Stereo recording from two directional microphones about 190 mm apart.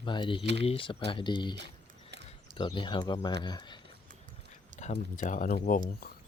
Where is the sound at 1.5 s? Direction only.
65° right (ahead or behind).